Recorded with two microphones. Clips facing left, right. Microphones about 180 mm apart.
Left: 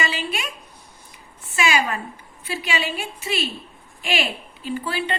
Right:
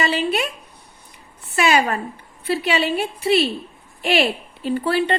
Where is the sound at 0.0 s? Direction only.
60° right (ahead or behind).